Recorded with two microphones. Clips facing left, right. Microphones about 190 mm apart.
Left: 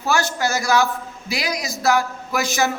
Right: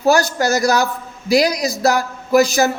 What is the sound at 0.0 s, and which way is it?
A man's voice, 40° right (ahead or behind).